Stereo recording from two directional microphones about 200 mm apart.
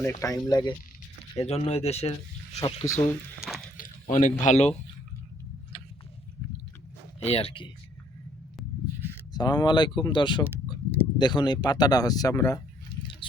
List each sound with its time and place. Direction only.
0.0 s speech: 15° left (ahead or behind)
1.4 s speech: 30° left (ahead or behind)
2.6 s speech: 15° left (ahead or behind)
3.8 s speech: 40° left (ahead or behind)
5.7 s a sound: 25° left (ahead or behind)
7.3 s speech: 30° left (ahead or behind)
9.3 s speech: 20° left (ahead or behind)
13.0 s a sound: 25° left (ahead or behind)